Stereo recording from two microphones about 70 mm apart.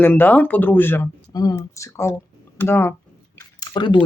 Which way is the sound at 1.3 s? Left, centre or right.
Left.